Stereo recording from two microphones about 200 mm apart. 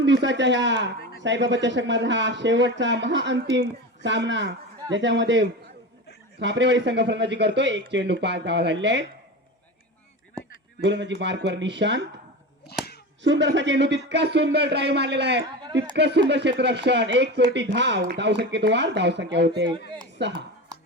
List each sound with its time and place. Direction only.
0.0 s a man's voice: 60° right (ahead or behind)
10.8 s a man's voice: 60° right (ahead or behind)
13.2 s a man's voice: 65° right (ahead or behind)